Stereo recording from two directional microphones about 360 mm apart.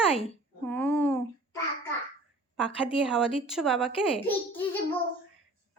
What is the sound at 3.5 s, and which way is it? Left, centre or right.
A child's voice, centre.